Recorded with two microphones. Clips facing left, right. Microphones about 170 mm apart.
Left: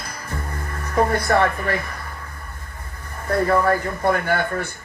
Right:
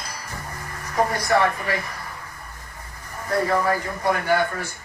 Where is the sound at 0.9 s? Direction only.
55° left (ahead or behind).